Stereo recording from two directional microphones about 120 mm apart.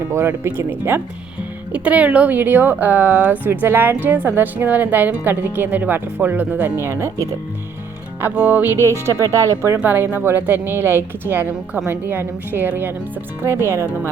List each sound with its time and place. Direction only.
0.1 s speech: 20° right (ahead or behind)